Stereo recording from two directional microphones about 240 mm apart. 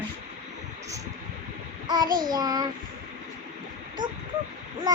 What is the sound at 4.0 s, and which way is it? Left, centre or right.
Child singing, right.